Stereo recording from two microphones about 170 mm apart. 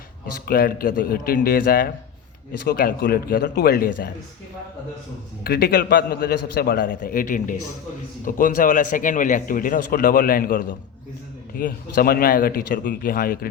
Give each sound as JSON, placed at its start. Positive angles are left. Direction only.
{"t": 0.4, "sound": "a man's voice", "side_deg": 60}
{"t": 5.4, "sound": "a man's voice", "side_deg": 65}